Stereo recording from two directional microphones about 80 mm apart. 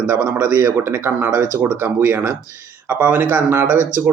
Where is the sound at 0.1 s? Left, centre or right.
Right.